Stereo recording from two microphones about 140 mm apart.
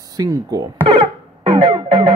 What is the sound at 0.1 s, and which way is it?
Music, 25° right (ahead or behind).